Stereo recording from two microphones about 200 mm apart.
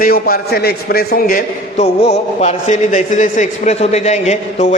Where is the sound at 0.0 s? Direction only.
45° left (ahead or behind).